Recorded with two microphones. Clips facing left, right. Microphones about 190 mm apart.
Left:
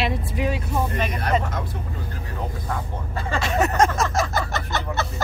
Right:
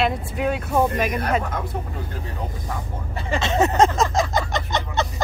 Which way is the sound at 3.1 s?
25° right (ahead or behind).